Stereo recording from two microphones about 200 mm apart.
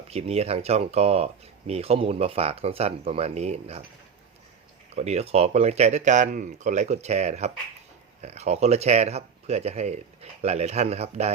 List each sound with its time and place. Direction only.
0.1 s speech: 30° right (ahead or behind)
4.9 s speech: 35° right (ahead or behind)